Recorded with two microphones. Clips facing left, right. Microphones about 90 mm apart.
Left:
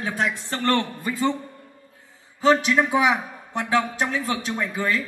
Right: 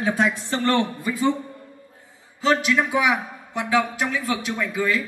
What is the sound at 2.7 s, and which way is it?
A woman's voice, 35° left (ahead or behind).